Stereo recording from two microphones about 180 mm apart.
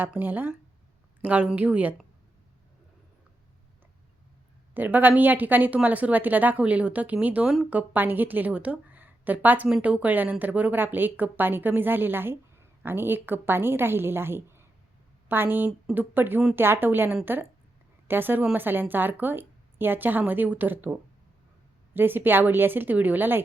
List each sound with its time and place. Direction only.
0.0 s a woman's voice: 10° right (ahead or behind)
4.7 s a woman's voice: 10° right (ahead or behind)